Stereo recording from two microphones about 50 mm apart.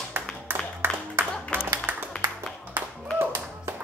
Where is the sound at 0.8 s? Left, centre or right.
Right.